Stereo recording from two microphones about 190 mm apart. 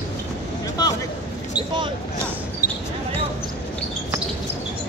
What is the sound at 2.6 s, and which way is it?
Basketball bounce, 50° left (ahead or behind).